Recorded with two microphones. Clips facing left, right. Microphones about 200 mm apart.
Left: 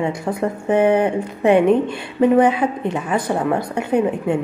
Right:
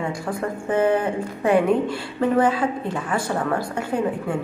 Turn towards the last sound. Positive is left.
turn(degrees=20)  # may be behind; listen again after turning